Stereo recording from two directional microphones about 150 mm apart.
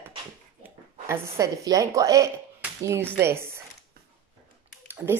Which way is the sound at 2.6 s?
15° right (ahead or behind).